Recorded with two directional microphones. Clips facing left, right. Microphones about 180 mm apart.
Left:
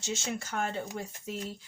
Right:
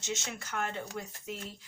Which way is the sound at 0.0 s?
30° left (ahead or behind).